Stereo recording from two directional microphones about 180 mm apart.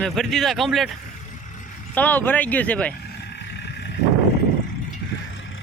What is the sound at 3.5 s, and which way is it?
Vehicle, 70° left (ahead or behind).